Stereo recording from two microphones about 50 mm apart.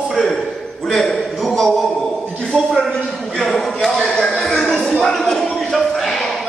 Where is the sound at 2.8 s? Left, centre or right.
Centre.